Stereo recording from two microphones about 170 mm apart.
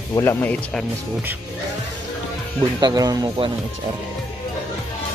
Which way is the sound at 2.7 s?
25° right (ahead or behind).